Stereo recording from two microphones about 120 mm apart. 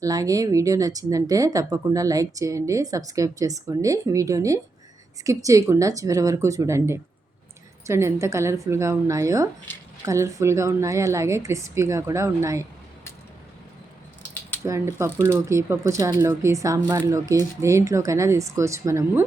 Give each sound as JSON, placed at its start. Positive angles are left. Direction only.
{"t": 0.0, "sound": "speech", "side_deg": -30}
{"t": 14.6, "sound": "speech", "side_deg": -25}